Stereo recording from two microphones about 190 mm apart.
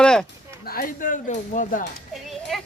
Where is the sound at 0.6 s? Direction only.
50° left (ahead or behind).